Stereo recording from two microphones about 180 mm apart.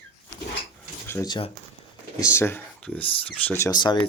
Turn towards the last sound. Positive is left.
turn(degrees=25)  # may be behind; listen again after turning